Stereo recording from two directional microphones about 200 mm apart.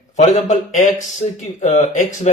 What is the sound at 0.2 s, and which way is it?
Speech, 35° left (ahead or behind).